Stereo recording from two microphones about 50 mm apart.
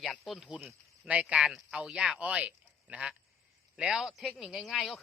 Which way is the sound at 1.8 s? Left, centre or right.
Right.